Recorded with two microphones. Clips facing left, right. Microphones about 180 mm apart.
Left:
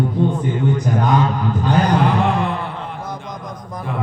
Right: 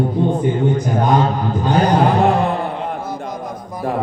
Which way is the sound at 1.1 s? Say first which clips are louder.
Right 3 dB; 35° right (ahead or behind).